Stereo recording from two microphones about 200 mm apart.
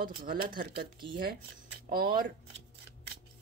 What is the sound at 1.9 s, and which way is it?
Speech, 50° right (ahead or behind).